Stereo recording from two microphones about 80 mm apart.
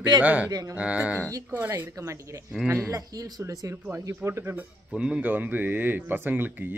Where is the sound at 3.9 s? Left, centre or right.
Right.